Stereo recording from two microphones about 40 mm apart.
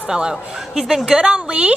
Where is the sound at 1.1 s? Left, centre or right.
Right.